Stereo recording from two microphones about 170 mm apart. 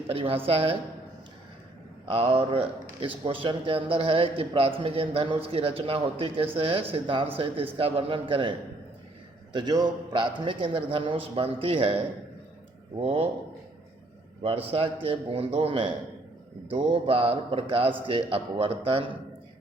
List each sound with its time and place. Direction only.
0.1 s a man's voice: 35° right (ahead or behind)
2.0 s a man's voice: 35° right (ahead or behind)
13.0 s a man's voice: 35° right (ahead or behind)
14.4 s a man's voice: 35° right (ahead or behind)